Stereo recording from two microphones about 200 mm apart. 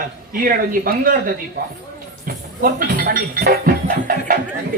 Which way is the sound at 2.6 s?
45° right (ahead or behind).